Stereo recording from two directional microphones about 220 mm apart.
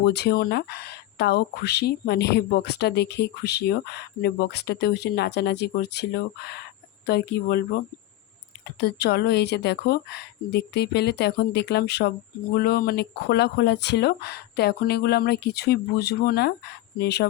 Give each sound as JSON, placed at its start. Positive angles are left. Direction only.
{"t": 0.0, "sound": "speech", "side_deg": 50}
{"t": 8.8, "sound": "speech", "side_deg": 45}